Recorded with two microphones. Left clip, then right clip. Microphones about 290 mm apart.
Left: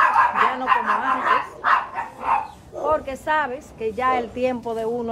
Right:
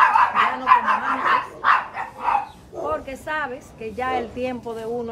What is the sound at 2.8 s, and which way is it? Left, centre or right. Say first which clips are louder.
Speech: left 5 dB; left.